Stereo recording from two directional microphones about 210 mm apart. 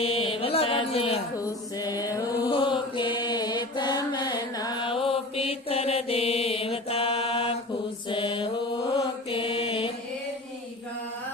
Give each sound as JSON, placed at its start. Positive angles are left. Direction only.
{"t": 0.0, "sound": "mantra", "side_deg": 25}
{"t": 1.4, "sound": "mantra", "side_deg": 15}